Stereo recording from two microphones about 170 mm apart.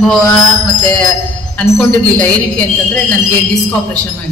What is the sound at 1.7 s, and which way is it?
Speech, 5° left (ahead or behind).